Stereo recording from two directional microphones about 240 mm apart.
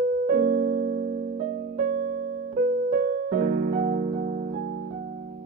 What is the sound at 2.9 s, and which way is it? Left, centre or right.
Music, right.